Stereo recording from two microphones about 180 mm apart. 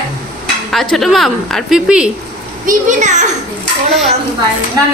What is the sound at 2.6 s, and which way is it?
Speech, 45° right (ahead or behind).